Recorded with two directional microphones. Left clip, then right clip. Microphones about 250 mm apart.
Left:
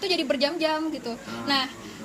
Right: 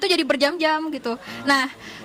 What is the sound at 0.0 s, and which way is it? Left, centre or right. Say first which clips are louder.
A woman's voice: right 5 dB; right.